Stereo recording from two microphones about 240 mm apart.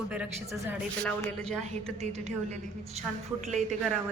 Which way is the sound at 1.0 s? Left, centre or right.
Centre.